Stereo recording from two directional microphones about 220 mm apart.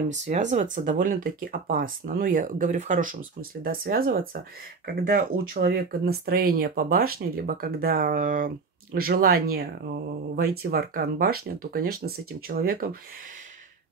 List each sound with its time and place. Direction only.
0.1 s speech: 35° right (ahead or behind)